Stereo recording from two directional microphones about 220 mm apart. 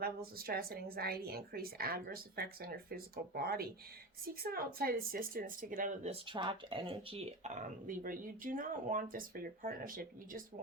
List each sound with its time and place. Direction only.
0.0 s speech: 45° right (ahead or behind)